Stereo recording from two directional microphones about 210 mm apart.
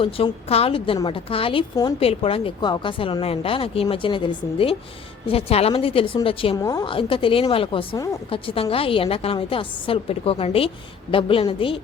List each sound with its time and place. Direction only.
0.0 s a woman's voice: 25° left (ahead or behind)